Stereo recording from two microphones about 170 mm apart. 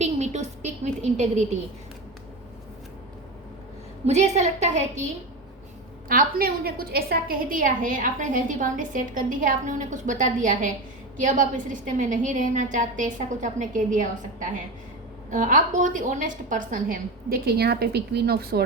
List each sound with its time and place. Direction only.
0.0 s a sound: 40° right (ahead or behind)
4.0 s a woman's voice: 40° right (ahead or behind)
6.1 s a woman's voice: 60° right (ahead or behind)